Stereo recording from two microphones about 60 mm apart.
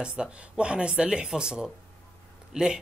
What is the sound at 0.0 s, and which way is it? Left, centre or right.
A man's voice, centre.